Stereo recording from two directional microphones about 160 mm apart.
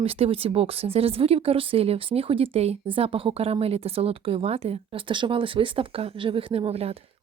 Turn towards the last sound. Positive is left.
turn(degrees=-40)  # may be behind; listen again after turning